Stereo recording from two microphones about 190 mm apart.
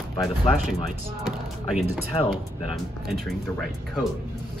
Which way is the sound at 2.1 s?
25° left (ahead or behind).